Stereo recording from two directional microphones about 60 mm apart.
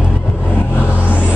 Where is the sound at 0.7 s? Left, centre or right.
Left.